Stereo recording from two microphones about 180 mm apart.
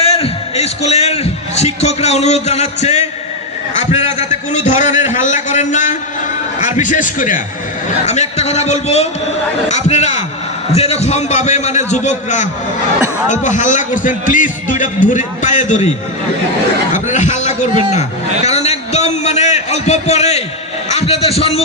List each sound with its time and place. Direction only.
0.1 s a man's voice: 35° left (ahead or behind)
16.9 s a man's voice: 40° left (ahead or behind)
18.4 s a sound: 35° left (ahead or behind)
20.9 s a man's voice: 35° left (ahead or behind)